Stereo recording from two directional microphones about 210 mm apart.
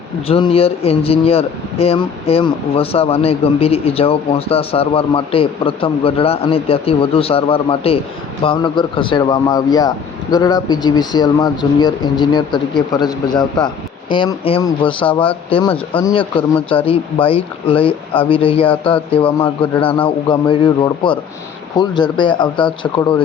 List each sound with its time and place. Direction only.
0.3 s speech: 25° left (ahead or behind)